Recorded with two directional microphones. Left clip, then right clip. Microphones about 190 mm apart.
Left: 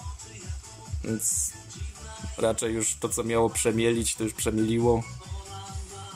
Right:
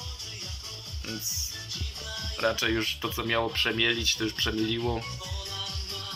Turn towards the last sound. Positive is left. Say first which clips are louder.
# left 5 dB
turn(degrees=25)  # may be behind; listen again after turning